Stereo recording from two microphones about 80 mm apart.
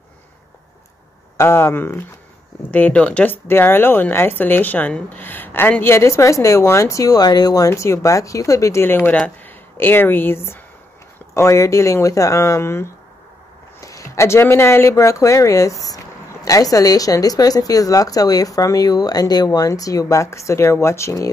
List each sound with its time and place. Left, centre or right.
1.3 s speech: left; by 3.3 s centre
3.4 s speech: left
8.8 s speech: left
13.7 s a sound: left
14.5 s speech: left